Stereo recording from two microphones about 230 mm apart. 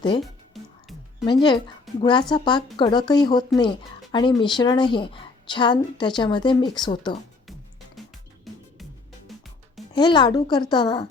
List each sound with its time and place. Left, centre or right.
0.2 s music: centre
1.2 s speech: centre
8.5 s music: centre
9.9 s speech: centre